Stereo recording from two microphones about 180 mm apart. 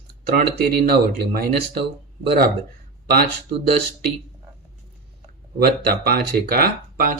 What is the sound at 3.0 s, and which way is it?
Speech, 60° right (ahead or behind).